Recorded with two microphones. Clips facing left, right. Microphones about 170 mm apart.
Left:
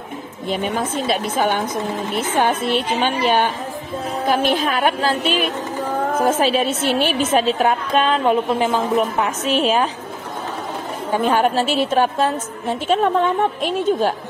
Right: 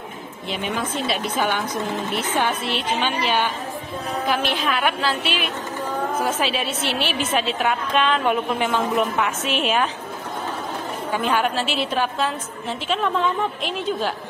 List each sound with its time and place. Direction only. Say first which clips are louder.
0.5 s a woman's voice: left 4 dB; 45° left (ahead or behind)
11.1 s a woman's voice: left 5 dB; 45° left (ahead or behind)